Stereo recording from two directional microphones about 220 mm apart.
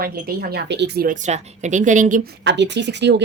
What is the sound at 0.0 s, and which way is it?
Speech, 45° right (ahead or behind).